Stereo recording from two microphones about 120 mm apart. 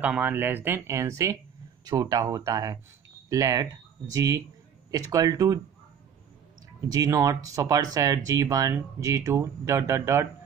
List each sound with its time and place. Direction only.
0.0 s speech: 15° right (ahead or behind); by 5.6 s 30° right (ahead or behind)
6.9 s speech: 30° right (ahead or behind)